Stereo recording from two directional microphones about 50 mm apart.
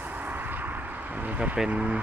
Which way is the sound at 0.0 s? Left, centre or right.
Right.